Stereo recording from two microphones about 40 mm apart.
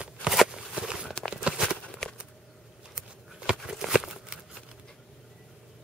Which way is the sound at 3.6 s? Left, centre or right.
Centre.